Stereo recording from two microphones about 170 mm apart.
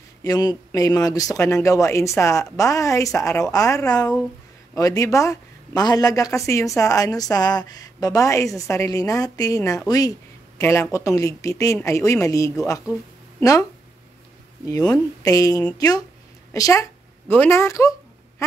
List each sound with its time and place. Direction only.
0.2 s speech: 20° left (ahead or behind)
14.7 s a woman's voice: 20° left (ahead or behind)